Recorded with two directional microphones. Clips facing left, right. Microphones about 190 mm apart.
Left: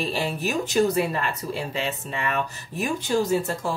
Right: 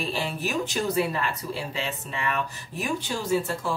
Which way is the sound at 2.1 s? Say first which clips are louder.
Even; 45° left (ahead or behind).